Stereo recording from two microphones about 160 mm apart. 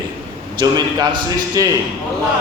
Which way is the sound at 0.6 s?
25° right (ahead or behind).